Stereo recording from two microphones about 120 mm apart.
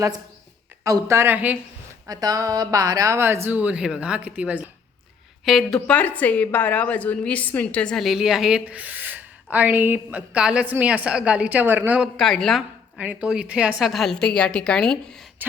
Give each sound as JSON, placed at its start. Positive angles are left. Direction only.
{"t": 0.9, "sound": "a woman's voice", "side_deg": -25}
{"t": 2.0, "sound": "a woman's voice", "side_deg": -30}
{"t": 5.5, "sound": "a woman's voice", "side_deg": 0}
{"t": 5.9, "sound": "a woman's voice", "side_deg": 15}
{"t": 12.1, "sound": "a woman's voice", "side_deg": 5}
{"t": 13.0, "sound": "a woman's voice", "side_deg": -10}